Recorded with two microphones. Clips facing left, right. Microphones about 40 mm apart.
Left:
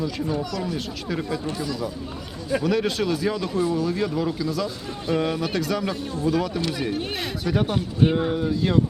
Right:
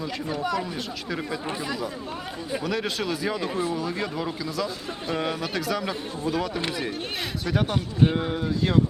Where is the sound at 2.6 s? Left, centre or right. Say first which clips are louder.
Left 5 dB; centre.